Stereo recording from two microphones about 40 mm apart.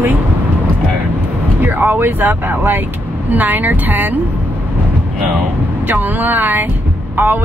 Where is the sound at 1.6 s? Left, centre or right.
Right.